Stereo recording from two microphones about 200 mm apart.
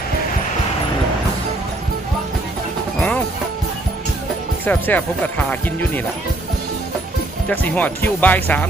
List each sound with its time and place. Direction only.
3.0 s music: 5° left (ahead or behind)
4.6 s speech: 10° left (ahead or behind)
7.4 s speech: 10° left (ahead or behind)